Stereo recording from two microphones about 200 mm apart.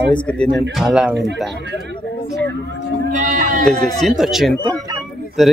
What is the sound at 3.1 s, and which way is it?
Speech, 40° right (ahead or behind).